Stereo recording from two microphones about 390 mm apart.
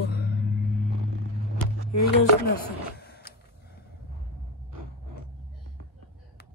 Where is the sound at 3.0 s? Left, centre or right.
Left.